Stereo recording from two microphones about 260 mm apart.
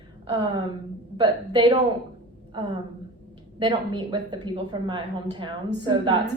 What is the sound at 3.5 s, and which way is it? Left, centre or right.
A woman's voice, centre.